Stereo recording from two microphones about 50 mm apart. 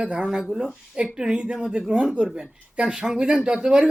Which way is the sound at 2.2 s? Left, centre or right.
Centre.